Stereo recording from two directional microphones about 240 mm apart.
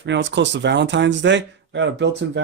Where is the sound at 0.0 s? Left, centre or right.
Right.